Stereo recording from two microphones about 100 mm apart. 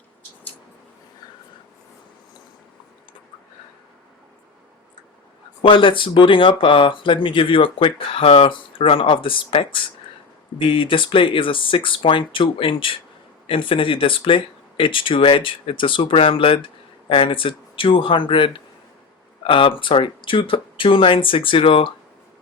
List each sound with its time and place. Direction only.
5.6 s speech: 60° left (ahead or behind)